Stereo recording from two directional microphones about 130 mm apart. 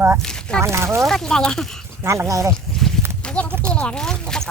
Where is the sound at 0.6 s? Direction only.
20° right (ahead or behind).